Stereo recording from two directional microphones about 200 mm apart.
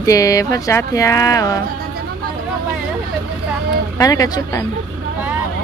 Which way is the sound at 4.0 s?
20° left (ahead or behind).